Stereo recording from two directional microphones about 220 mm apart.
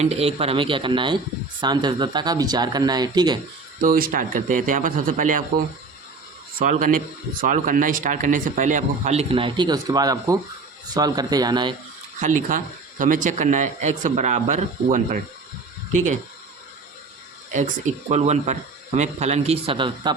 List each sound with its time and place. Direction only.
0.0 s speech: 30° right (ahead or behind)
3.8 s speech: 40° right (ahead or behind)
6.6 s speech: 35° right (ahead or behind); by 11.7 s 20° right (ahead or behind)
12.2 s speech: 35° right (ahead or behind)
17.5 s speech: 35° right (ahead or behind)